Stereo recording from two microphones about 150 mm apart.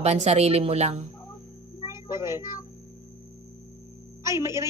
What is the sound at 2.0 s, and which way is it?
Speech, 25° left (ahead or behind).